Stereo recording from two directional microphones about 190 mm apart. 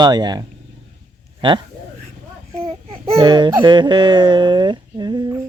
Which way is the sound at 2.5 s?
5° left (ahead or behind).